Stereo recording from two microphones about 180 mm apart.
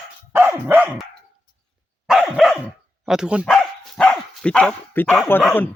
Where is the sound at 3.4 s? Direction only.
5° left (ahead or behind).